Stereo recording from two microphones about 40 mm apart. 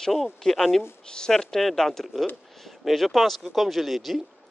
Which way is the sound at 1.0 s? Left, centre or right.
Centre.